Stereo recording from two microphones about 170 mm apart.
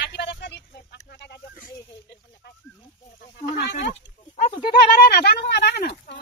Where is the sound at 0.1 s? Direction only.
90° left.